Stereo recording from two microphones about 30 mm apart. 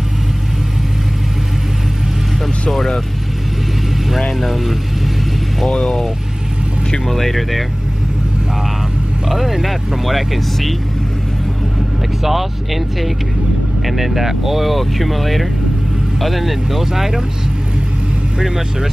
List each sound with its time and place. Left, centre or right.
2.7 s speech: centre
4.4 s speech: centre
5.7 s speech: centre
7.1 s speech: centre
9.3 s speech: centre
12.2 s speech: centre